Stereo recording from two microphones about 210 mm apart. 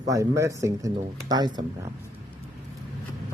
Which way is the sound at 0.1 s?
15° right (ahead or behind).